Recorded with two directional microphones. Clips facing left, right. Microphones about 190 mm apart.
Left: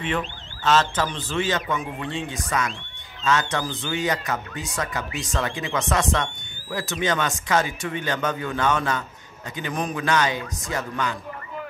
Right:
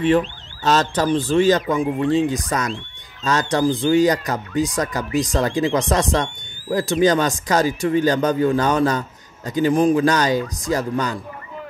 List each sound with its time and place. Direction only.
0.7 s speech: 40° right (ahead or behind)